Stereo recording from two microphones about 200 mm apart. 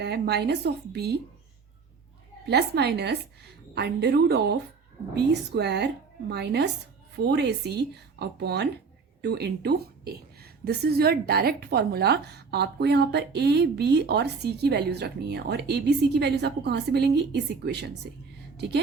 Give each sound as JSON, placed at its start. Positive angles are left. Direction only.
{"t": 0.0, "sound": "a woman's voice", "side_deg": -55}
{"t": 2.5, "sound": "a woman's voice", "side_deg": -55}